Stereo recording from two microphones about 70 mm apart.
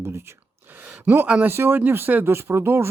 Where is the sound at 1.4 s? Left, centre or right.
Right.